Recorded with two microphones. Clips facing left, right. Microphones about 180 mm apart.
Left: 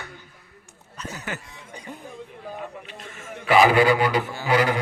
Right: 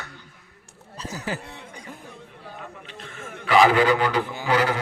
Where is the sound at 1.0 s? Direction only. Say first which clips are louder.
Right 3 dB; 30° right (ahead or behind).